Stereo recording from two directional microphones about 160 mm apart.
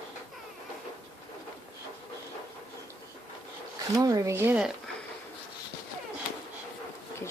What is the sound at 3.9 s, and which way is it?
Speech, 20° right (ahead or behind).